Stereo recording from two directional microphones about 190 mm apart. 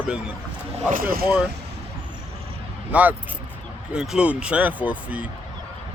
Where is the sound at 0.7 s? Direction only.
50° right (ahead or behind).